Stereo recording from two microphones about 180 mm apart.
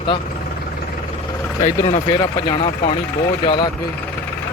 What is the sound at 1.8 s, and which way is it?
Speech, 30° left (ahead or behind).